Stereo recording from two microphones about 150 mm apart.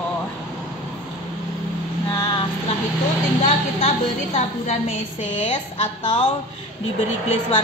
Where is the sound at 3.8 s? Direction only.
50° left (ahead or behind).